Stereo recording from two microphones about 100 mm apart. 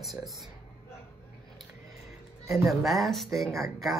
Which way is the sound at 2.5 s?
Centre (ahead or behind).